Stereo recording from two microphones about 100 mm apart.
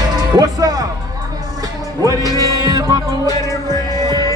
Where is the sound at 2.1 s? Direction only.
35° left (ahead or behind).